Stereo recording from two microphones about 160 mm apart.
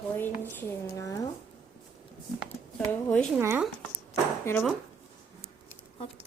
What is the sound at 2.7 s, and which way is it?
Speech, 5° left (ahead or behind).